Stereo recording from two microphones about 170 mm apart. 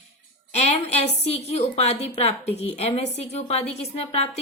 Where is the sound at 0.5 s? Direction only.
40° left (ahead or behind).